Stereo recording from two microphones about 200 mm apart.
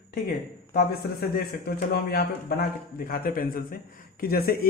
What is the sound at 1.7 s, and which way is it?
Speech, 50° left (ahead or behind).